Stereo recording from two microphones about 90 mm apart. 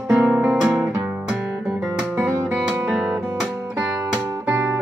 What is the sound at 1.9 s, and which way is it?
Music, 15° right (ahead or behind).